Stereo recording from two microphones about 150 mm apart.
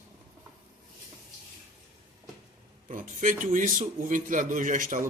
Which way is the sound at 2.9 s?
60° right (ahead or behind).